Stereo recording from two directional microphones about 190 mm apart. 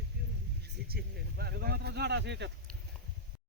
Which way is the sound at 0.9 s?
55° right (ahead or behind).